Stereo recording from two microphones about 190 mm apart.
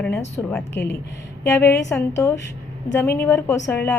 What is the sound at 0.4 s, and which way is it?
A woman's voice, 15° left (ahead or behind).